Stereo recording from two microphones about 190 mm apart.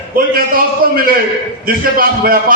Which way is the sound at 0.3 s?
50° right (ahead or behind).